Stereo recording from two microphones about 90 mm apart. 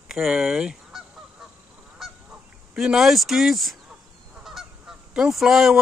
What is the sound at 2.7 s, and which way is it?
A man's voice, 5° right (ahead or behind).